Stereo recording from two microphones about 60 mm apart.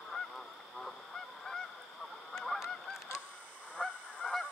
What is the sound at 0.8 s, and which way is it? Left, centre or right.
Honk, centre.